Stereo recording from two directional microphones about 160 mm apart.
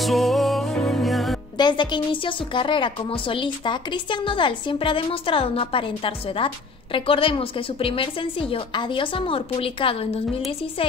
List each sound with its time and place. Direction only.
0.0 s music: centre (ahead or behind)
1.6 s a woman's voice: 30° left (ahead or behind)